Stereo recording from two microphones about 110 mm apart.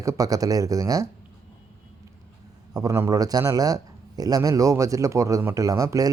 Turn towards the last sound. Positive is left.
turn(degrees=-30)  # may be behind; listen again after turning